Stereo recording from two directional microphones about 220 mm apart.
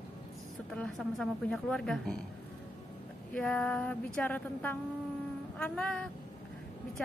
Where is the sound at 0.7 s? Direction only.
5° left (ahead or behind).